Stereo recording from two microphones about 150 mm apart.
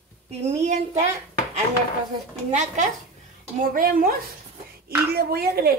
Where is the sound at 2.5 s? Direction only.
50° right (ahead or behind).